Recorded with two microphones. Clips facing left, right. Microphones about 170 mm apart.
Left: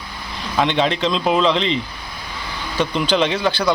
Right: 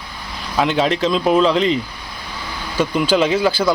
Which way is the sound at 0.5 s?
5° right (ahead or behind).